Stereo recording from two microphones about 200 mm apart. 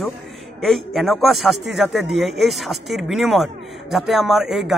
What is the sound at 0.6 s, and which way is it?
A man's voice, centre (ahead or behind).